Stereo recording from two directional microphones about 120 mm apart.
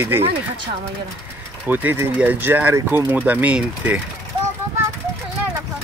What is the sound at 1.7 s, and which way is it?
Speech, 15° right (ahead or behind).